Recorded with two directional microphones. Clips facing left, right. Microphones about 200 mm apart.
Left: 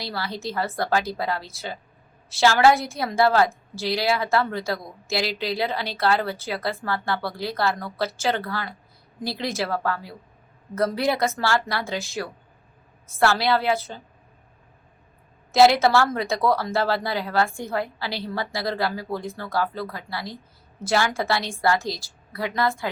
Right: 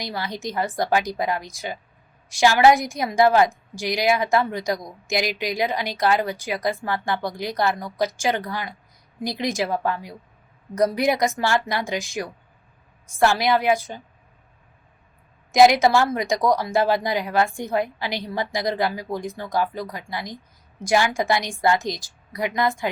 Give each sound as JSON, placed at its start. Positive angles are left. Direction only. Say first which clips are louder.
{"t": 0.0, "sound": "a woman's voice", "louder": "right 1 dB", "side_deg": -15}
{"t": 15.5, "sound": "a woman's voice", "louder": "right 1 dB", "side_deg": -15}